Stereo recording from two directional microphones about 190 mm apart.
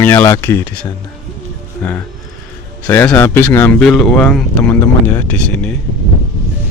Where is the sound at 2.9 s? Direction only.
10° left (ahead or behind).